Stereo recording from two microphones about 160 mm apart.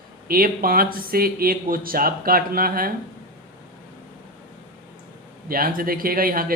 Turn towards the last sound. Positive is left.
turn(degrees=-65)  # may be behind; listen again after turning